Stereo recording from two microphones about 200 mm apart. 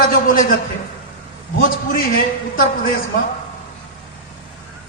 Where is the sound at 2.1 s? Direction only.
45° left (ahead or behind).